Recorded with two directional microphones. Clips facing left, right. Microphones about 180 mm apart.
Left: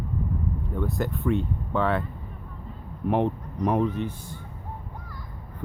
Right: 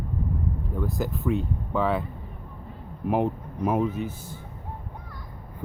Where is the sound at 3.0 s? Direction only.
5° right (ahead or behind).